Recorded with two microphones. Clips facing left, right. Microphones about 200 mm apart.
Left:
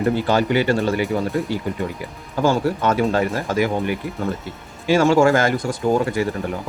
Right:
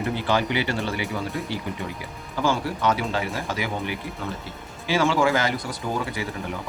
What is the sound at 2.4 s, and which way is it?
Speech, 45° left (ahead or behind).